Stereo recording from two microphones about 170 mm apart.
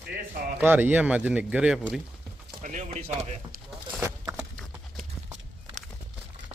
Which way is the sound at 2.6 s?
45° right (ahead or behind).